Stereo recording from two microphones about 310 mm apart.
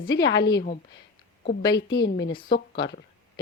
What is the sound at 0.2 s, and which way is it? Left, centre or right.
Speech, left.